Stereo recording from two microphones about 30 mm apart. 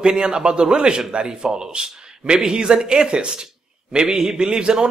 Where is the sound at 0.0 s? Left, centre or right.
Right.